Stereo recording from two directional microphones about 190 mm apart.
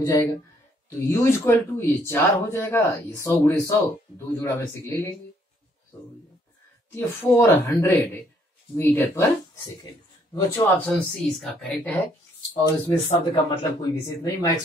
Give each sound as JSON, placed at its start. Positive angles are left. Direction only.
{"t": 0.0, "sound": "speech", "side_deg": 15}
{"t": 6.9, "sound": "speech", "side_deg": 15}
{"t": 10.3, "sound": "speech", "side_deg": 20}
{"t": 10.9, "sound": "speech", "side_deg": 5}
{"t": 12.8, "sound": "speech", "side_deg": 25}